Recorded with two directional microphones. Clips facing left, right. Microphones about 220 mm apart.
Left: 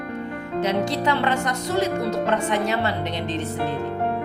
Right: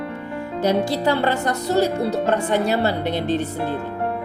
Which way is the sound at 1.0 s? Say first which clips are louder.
Right 3 dB; 35° right (ahead or behind).